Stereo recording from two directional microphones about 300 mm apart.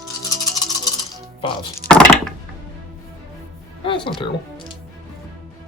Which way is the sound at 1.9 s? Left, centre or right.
Centre.